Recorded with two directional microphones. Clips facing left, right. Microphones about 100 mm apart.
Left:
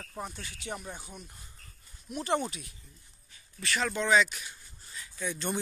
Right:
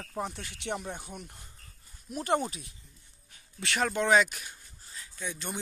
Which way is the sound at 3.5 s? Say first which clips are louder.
Right 1 dB; 65° right (ahead or behind).